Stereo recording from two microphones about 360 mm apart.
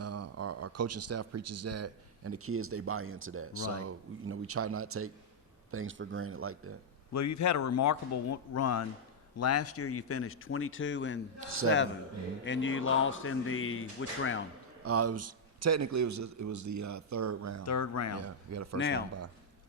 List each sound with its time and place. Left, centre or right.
0.0 s speech: right
7.1 s speech: left
12.5 s speech: left
14.8 s a man's voice: right
17.7 s speech: left
18.2 s a man's voice: right
18.8 s speech: left